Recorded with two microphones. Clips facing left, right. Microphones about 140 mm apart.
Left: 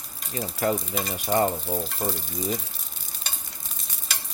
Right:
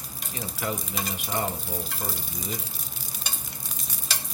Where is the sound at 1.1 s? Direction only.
40° left (ahead or behind).